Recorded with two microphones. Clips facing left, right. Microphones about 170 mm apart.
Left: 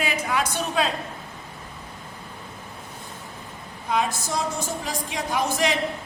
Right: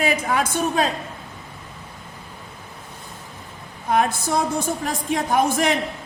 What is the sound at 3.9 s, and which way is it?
A woman's voice, 55° right (ahead or behind).